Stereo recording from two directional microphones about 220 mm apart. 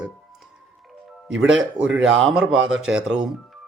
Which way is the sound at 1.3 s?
60° right (ahead or behind).